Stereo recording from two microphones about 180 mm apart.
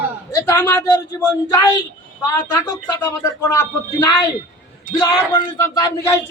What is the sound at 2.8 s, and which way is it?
Speech, 15° left (ahead or behind).